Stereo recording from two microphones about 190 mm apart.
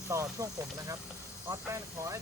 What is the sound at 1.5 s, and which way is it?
Speech, 15° right (ahead or behind).